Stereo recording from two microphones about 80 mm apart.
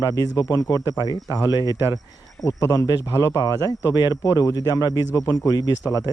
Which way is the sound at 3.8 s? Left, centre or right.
Right.